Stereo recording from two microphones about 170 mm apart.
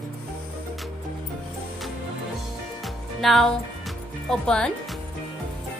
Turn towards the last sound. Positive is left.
turn(degrees=5)  # may be behind; listen again after turning